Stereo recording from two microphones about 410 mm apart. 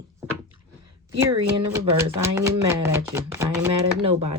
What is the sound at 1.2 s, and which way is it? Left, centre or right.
Speech, centre.